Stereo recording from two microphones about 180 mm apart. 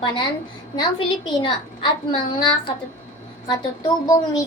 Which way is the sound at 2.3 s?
25° left (ahead or behind).